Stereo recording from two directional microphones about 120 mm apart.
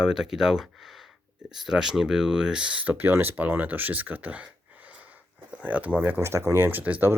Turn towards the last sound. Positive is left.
turn(degrees=-15)  # may be behind; listen again after turning